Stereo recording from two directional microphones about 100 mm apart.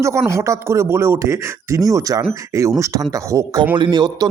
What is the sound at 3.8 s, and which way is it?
Speech, 50° right (ahead or behind).